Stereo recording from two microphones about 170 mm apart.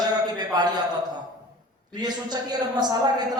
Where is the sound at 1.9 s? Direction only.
25° right (ahead or behind).